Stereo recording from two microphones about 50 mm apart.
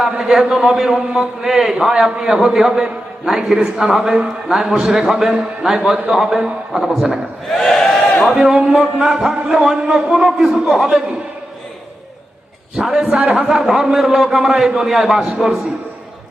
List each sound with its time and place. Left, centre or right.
0.2 s a man's voice: centre
7.6 s a sound: centre
8.3 s a man's voice: centre
12.7 s a man's voice: centre